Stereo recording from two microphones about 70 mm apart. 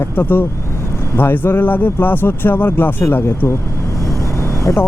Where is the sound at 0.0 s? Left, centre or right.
Left.